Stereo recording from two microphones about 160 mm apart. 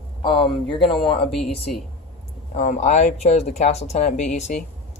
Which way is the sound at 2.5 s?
50° left (ahead or behind).